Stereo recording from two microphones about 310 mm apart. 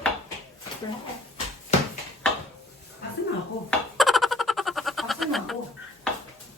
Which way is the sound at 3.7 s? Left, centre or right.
Centre.